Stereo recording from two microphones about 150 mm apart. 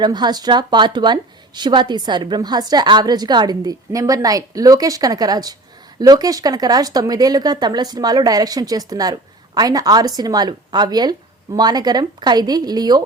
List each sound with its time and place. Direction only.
0.0 s a woman's voice: 30° right (ahead or behind)